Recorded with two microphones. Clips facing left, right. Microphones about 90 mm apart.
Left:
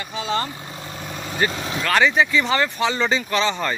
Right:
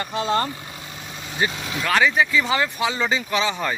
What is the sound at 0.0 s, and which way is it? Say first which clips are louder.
Speech: right 3 dB; 50° right (ahead or behind).